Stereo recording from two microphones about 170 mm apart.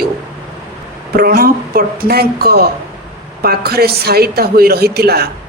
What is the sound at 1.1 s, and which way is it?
A man's voice, 60° right (ahead or behind).